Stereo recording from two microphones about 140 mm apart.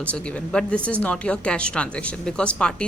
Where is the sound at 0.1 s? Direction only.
10° left (ahead or behind).